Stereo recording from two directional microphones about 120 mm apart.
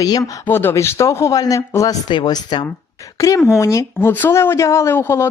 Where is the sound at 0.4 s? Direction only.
20° left (ahead or behind); by 2.6 s 40° left (ahead or behind).